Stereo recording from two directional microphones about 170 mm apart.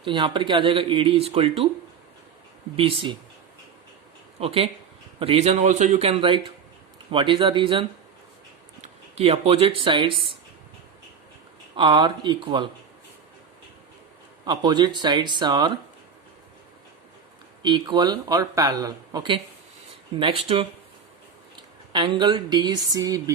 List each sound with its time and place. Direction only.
0.0 s speech: 30° right (ahead or behind)
4.4 s speech: 35° right (ahead or behind)
11.8 s speech: 25° right (ahead or behind)
14.4 s speech: 25° right (ahead or behind)
17.6 s speech: 25° right (ahead or behind)